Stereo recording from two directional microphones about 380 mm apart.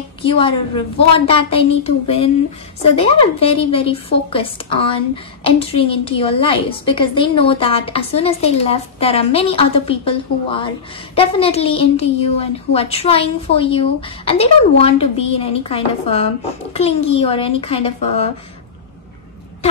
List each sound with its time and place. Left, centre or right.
0.2 s a woman's voice: centre